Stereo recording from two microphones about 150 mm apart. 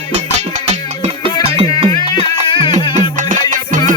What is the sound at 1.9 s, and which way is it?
Music, 35° left (ahead or behind).